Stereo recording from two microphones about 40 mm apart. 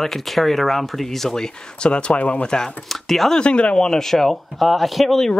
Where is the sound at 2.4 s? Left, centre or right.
Centre.